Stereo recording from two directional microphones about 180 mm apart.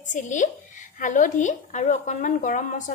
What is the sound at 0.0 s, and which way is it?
A woman's voice, 45° left (ahead or behind).